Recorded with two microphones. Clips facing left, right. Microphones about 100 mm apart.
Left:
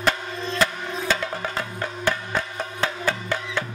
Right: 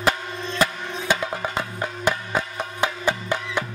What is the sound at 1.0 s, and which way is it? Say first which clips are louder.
Music: right 2 dB; 15° right (ahead or behind).